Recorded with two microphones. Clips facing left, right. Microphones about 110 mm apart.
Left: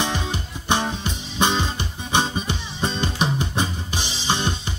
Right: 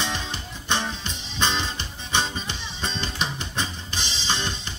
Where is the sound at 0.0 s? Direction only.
10° left (ahead or behind).